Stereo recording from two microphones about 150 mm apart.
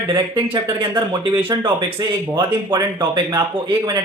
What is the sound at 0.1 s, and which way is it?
Speech, 30° right (ahead or behind).